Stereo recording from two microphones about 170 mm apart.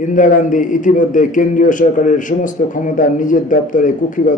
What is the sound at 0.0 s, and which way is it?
A man's voice, 50° left (ahead or behind).